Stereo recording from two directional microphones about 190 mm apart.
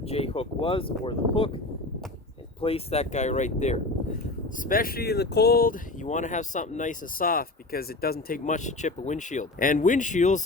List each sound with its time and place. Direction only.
0.0 s speech: 30° left (ahead or behind)